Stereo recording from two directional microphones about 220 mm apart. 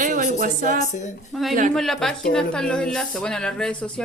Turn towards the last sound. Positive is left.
turn(degrees=5)  # may be behind; listen again after turning